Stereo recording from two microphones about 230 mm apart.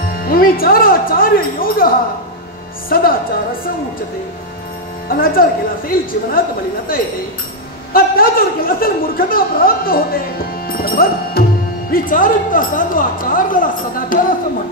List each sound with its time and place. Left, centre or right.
0.2 s speech: left
2.9 s a woman's voice: left
5.0 s a woman's voice: left
7.9 s a woman's voice: left
10.7 s music: left
11.9 s a woman's voice: left